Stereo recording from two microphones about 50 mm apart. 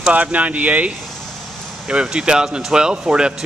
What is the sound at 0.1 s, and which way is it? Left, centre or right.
Speech, right.